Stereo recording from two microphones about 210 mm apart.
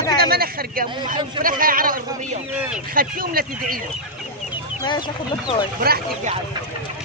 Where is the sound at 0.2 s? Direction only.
50° right (ahead or behind).